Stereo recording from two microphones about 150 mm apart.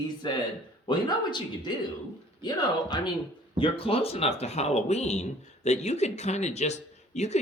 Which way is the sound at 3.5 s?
35° left (ahead or behind).